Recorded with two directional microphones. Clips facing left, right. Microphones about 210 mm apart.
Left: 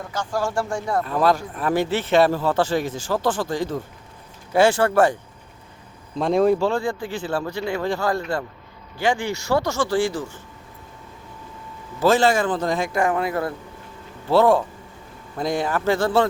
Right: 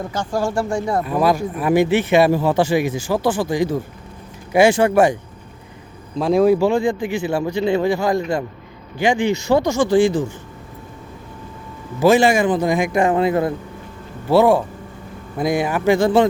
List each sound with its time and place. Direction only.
0.0 s speech: 20° right (ahead or behind)
0.5 s speech: 10° right (ahead or behind)
6.1 s speech: centre (ahead or behind)
11.9 s speech: 10° right (ahead or behind)
14.3 s speech: 10° right (ahead or behind)